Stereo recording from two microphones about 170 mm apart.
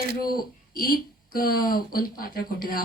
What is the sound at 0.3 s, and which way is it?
Speech, 60° left (ahead or behind).